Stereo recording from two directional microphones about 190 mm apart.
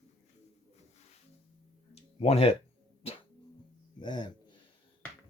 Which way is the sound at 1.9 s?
35° left (ahead or behind).